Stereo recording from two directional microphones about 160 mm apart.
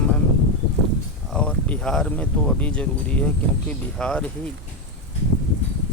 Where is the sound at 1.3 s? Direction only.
5° left (ahead or behind).